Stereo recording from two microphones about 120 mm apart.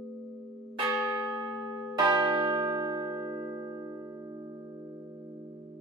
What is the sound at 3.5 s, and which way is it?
Music, 35° right (ahead or behind).